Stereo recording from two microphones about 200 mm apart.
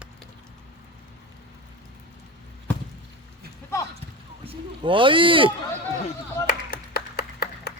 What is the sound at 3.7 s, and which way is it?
Clip-clop, 15° left (ahead or behind).